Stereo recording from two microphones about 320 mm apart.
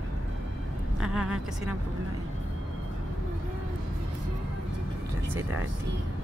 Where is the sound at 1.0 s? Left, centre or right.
Centre.